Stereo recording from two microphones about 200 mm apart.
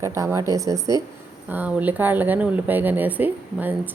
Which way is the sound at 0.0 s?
15° right (ahead or behind).